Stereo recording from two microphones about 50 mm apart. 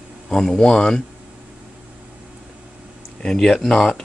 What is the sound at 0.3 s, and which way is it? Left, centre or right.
Speech, centre.